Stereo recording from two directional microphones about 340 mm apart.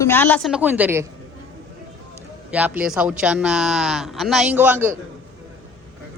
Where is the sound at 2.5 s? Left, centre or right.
Centre.